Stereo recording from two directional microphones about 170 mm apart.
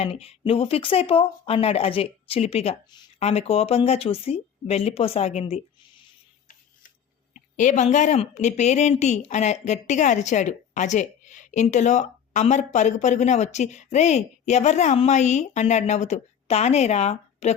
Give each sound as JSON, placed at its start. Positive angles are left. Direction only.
{"t": 0.0, "sound": "speech", "side_deg": 35}
{"t": 7.3, "sound": "a woman's voice", "side_deg": 45}